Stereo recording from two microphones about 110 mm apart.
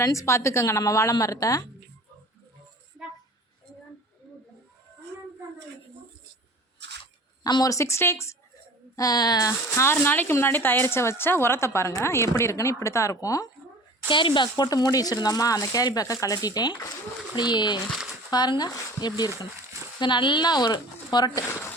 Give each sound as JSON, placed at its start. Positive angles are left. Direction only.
{"t": 0.0, "sound": "speech", "side_deg": 30}
{"t": 7.0, "sound": "speech", "side_deg": 40}
{"t": 9.0, "sound": "speech", "side_deg": 35}
{"t": 14.1, "sound": "speech", "side_deg": 50}
{"t": 21.4, "sound": "speech", "side_deg": 20}